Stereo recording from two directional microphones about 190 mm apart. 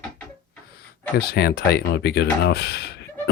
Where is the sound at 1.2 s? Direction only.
55° left (ahead or behind).